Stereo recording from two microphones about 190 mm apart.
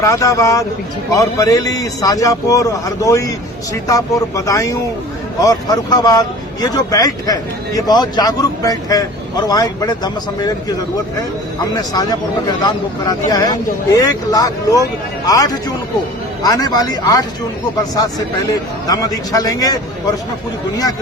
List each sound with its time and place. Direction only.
0.0 s a man's voice: 15° left (ahead or behind)
16.4 s speech: 20° left (ahead or behind)